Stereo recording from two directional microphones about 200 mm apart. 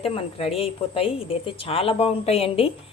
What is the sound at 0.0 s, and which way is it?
A woman's voice, 30° left (ahead or behind).